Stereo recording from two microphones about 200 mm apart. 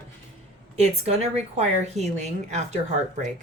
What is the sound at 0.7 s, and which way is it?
Speech, 35° right (ahead or behind).